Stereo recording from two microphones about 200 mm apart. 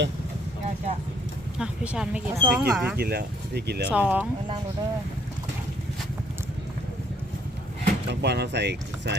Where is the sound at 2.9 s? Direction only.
55° right (ahead or behind).